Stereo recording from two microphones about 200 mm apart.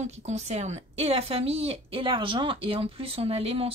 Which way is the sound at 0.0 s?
35° right (ahead or behind).